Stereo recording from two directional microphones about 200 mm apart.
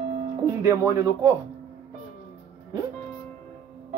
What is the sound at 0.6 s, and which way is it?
Speech, 15° right (ahead or behind).